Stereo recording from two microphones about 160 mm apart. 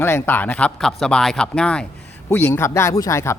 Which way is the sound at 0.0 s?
15° left (ahead or behind).